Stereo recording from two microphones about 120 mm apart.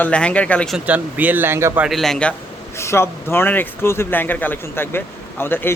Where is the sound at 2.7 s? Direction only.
20° left (ahead or behind).